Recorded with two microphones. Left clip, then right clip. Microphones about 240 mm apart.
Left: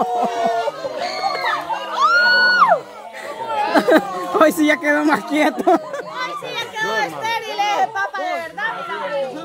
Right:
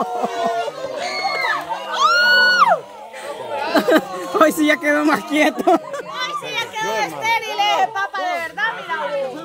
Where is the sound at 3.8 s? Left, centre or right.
Centre.